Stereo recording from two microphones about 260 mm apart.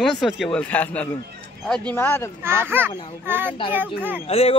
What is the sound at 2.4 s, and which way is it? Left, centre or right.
Child singing, centre.